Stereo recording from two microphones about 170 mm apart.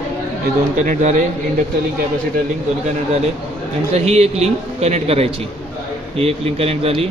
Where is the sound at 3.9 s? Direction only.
40° right (ahead or behind).